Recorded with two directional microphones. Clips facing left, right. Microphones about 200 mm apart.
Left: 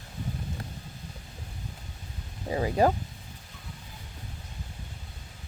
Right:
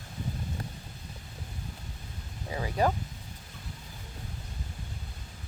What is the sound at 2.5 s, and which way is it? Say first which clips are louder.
Speech: left 5 dB; 30° left (ahead or behind).